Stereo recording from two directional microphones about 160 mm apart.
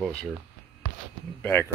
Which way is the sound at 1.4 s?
10° left (ahead or behind).